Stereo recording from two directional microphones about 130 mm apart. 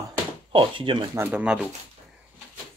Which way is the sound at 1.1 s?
15° right (ahead or behind).